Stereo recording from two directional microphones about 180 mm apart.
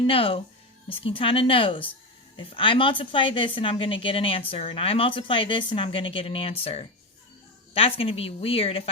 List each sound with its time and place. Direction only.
0.1 s a woman's voice: 30° left (ahead or behind)